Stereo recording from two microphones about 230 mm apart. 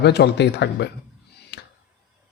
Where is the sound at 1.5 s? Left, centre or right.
Left.